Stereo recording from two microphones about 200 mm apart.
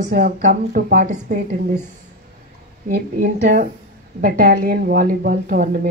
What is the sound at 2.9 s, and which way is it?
Speech, 50° right (ahead or behind).